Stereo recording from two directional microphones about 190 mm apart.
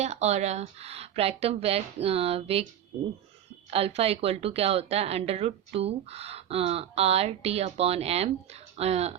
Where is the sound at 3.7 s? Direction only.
30° right (ahead or behind).